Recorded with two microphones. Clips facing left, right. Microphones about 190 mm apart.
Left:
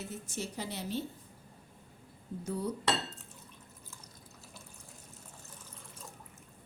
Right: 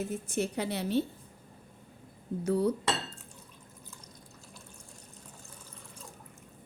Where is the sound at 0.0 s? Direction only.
55° right (ahead or behind).